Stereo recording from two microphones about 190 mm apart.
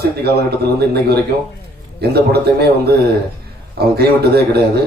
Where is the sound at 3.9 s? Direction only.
55° right (ahead or behind).